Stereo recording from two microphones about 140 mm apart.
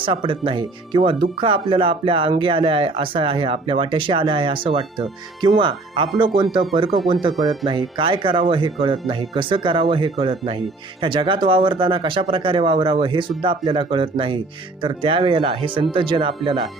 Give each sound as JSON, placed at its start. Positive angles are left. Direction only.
{"t": 0.0, "sound": "speech", "side_deg": -35}